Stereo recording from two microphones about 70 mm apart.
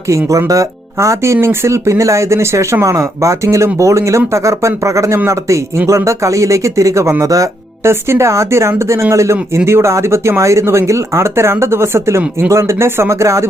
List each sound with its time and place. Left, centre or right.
0.1 s speech: right
7.9 s speech: right